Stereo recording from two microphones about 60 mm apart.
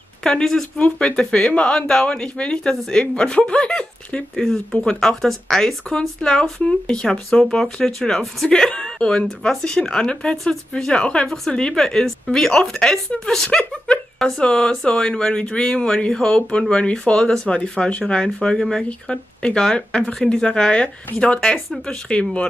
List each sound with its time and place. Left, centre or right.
0.2 s speech: centre
0.7 s speech: centre
10.7 s speech: centre